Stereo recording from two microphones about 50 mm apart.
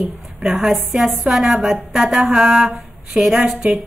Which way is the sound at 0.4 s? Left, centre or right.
Centre.